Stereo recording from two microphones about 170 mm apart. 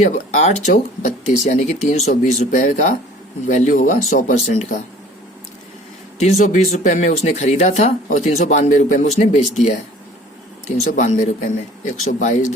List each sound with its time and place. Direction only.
0.0 s speech: 45° left (ahead or behind)
6.1 s speech: 40° left (ahead or behind)
10.9 s speech: 45° left (ahead or behind)